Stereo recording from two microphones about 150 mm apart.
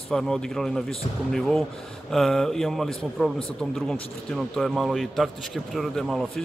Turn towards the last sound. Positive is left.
turn(degrees=0)  # may be behind; listen again after turning